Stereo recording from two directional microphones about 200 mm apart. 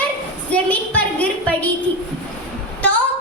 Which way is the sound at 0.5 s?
10° left (ahead or behind).